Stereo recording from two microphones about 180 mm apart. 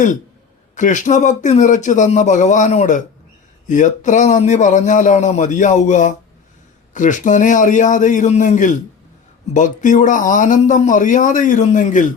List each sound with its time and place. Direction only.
0.8 s speech: 45° left (ahead or behind)